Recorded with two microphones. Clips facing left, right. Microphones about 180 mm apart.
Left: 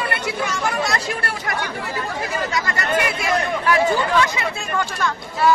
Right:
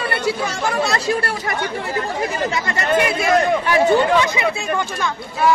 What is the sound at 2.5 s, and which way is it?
Speech, 25° right (ahead or behind).